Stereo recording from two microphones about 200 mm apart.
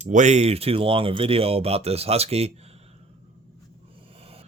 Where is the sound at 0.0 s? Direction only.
40° right (ahead or behind).